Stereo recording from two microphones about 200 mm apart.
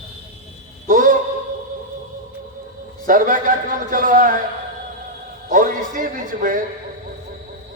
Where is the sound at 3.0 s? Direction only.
45° right (ahead or behind).